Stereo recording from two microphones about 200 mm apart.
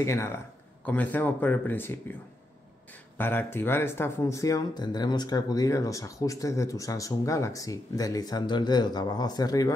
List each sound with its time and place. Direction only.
0.0 s speech: 15° left (ahead or behind)
3.2 s speech: 10° left (ahead or behind)